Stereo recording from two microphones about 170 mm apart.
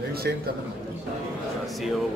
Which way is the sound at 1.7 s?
Centre (ahead or behind).